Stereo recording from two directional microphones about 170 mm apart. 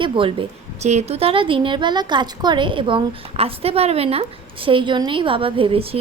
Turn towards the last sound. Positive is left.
turn(degrees=-35)  # may be behind; listen again after turning